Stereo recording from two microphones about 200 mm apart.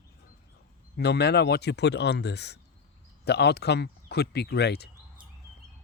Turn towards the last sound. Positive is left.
turn(degrees=55)  # may be behind; listen again after turning